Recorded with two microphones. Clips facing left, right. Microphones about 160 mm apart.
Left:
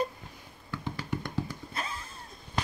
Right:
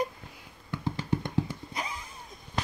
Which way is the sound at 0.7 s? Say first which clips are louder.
Right 4 dB; 25° right (ahead or behind).